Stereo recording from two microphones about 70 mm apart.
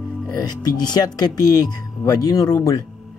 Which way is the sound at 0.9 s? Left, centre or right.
Left.